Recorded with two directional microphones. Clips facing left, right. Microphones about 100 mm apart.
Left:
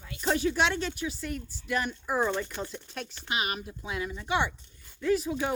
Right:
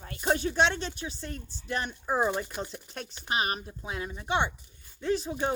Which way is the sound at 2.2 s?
15° right (ahead or behind).